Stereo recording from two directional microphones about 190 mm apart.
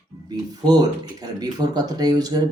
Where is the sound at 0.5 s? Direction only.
20° right (ahead or behind).